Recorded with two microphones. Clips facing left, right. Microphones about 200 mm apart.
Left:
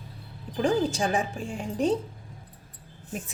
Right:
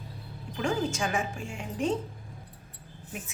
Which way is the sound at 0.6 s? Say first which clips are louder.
Left 5 dB; 35° left (ahead or behind).